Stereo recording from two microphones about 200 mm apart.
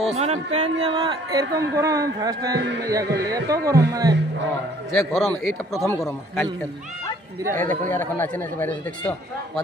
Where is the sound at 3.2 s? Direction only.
15° right (ahead or behind).